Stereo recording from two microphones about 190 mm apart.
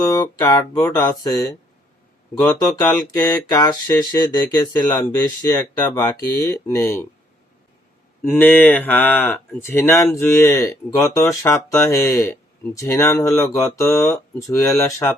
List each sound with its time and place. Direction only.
0.0 s speech: 20° left (ahead or behind)
2.7 s speech: 20° left (ahead or behind)
8.2 s speech: 10° left (ahead or behind)